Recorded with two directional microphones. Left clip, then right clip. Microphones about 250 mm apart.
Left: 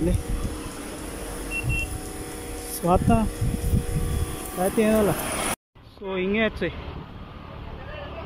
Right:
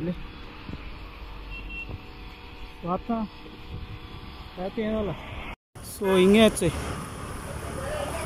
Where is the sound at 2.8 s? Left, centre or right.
Left.